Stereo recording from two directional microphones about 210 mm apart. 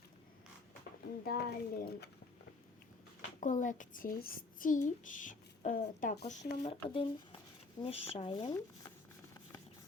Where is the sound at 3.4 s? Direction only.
35° left (ahead or behind); by 8.9 s 20° left (ahead or behind).